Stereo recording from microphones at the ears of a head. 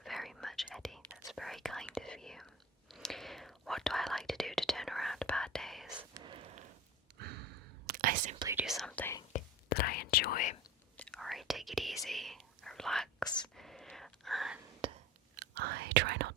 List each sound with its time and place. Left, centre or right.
0.0 s whispering: centre
6.1 s gasp: right
7.2 s whispering: right
9.1 s whispering: left
11.0 s whispering: centre
14.8 s whispering: right